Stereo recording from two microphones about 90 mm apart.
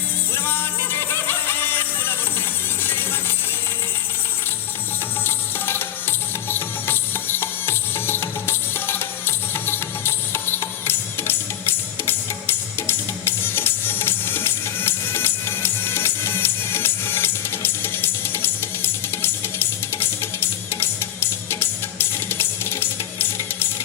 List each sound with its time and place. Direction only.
0.3 s music: 25° left (ahead or behind)
5.2 s music: 25° left (ahead or behind)